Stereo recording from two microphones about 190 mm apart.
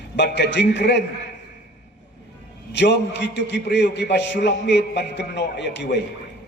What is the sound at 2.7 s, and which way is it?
A man's voice, 65° left (ahead or behind).